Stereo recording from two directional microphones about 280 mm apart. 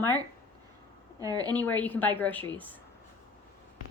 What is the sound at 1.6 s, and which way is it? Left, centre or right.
A woman's voice, centre.